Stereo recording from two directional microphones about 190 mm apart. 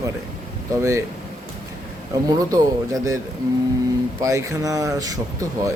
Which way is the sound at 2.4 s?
20° right (ahead or behind).